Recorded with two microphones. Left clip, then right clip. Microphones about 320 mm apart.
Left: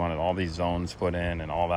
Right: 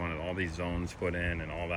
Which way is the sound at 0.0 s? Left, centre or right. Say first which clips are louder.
Left 8 dB; centre.